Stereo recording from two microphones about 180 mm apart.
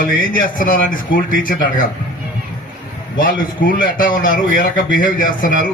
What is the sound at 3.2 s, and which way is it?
Speech, 50° left (ahead or behind).